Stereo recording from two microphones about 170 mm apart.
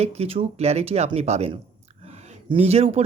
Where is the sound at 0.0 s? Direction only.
40° right (ahead or behind).